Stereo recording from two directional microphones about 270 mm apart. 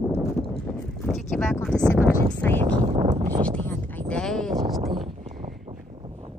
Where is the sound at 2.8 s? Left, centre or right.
Right.